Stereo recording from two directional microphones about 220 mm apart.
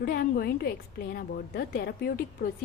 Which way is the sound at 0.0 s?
45° left (ahead or behind).